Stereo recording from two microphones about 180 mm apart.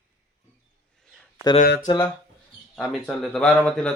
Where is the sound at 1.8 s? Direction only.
20° left (ahead or behind).